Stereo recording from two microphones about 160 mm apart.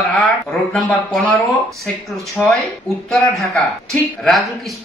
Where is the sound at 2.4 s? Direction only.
5° left (ahead or behind).